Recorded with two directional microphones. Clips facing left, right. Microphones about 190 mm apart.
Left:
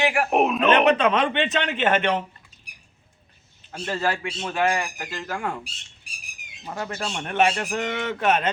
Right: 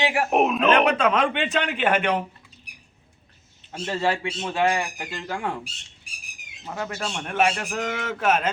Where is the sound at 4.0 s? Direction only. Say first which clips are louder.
Right 2 dB; 20° right (ahead or behind).